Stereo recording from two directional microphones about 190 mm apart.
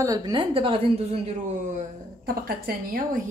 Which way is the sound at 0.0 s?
20° right (ahead or behind).